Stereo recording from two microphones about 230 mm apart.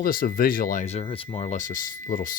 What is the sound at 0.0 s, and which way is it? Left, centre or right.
Speech, left.